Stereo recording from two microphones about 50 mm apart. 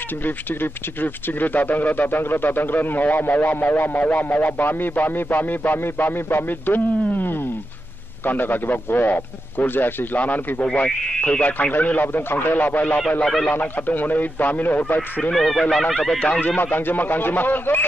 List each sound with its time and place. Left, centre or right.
0.2 s a man's voice: left
11.1 s speech: left
11.7 s a man's voice: left
13.2 s speech: centre
13.5 s a man's voice: left
15.3 s speech: centre
16.2 s a man's voice: left